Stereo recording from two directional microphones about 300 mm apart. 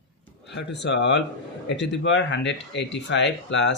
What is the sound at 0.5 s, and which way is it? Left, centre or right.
Speech, left.